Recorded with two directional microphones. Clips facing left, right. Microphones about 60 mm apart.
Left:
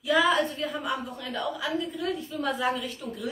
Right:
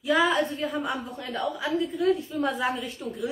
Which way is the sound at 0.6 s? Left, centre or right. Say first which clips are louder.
Right 1 dB; right.